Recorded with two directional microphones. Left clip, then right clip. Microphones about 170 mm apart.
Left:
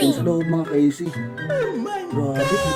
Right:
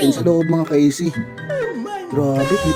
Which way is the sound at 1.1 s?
Centre (ahead or behind).